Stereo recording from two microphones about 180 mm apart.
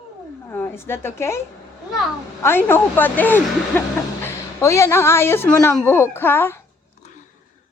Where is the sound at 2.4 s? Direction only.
10° left (ahead or behind).